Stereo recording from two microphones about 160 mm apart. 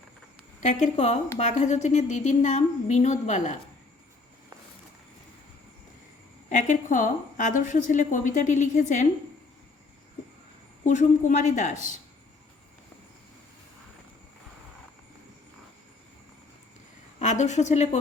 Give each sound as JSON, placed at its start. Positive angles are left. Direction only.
{"t": 0.6, "sound": "a woman's voice", "side_deg": 50}
{"t": 6.5, "sound": "a woman's voice", "side_deg": 50}
{"t": 10.8, "sound": "a woman's voice", "side_deg": 50}
{"t": 17.2, "sound": "a woman's voice", "side_deg": 50}